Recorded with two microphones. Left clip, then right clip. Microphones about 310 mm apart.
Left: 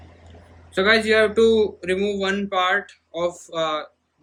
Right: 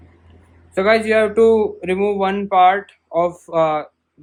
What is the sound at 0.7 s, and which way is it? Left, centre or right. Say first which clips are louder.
Speech: right 3 dB; centre.